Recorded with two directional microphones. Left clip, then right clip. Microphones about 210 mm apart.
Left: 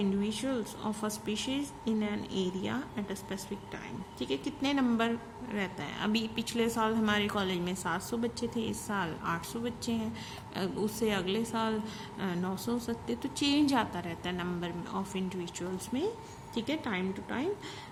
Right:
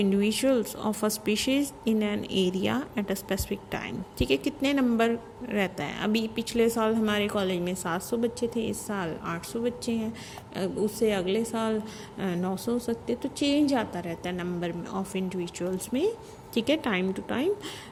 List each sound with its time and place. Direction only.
0.0 s a woman's voice: 25° right (ahead or behind)